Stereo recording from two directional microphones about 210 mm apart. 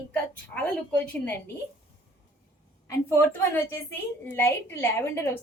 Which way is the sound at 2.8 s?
15° left (ahead or behind).